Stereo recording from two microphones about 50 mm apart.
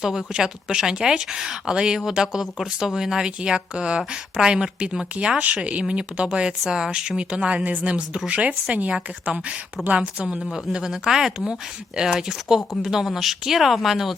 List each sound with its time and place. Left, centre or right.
0.0 s speech: centre; by 10.2 s right
10.5 s speech: centre